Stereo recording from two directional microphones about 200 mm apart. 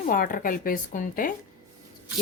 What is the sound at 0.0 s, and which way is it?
A woman's voice, 45° left (ahead or behind).